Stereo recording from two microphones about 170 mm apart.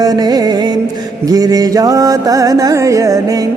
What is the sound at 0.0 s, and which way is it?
Music, 25° right (ahead or behind).